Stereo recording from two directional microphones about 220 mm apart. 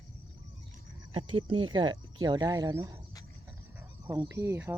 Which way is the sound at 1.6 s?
20° right (ahead or behind).